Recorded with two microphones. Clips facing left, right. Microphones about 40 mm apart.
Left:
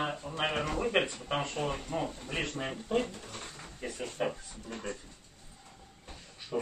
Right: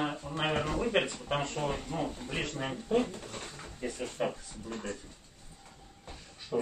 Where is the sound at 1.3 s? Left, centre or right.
Centre.